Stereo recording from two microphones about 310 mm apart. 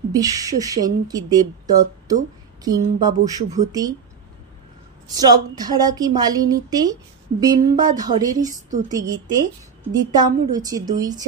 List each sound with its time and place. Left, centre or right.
0.1 s speech: centre
5.0 s speech: centre